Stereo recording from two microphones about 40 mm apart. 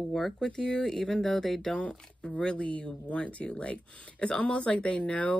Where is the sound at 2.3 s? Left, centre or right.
Left.